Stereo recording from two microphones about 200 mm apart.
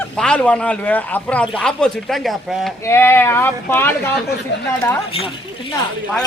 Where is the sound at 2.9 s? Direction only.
10° left (ahead or behind).